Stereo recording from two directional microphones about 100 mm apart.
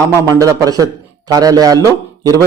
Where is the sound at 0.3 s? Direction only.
35° right (ahead or behind).